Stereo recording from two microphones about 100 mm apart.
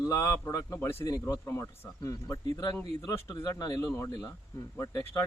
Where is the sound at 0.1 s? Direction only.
30° left (ahead or behind).